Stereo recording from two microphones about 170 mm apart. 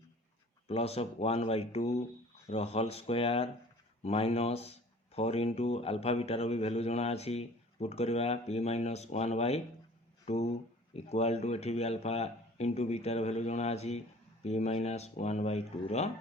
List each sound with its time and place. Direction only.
0.7 s speech: 35° left (ahead or behind)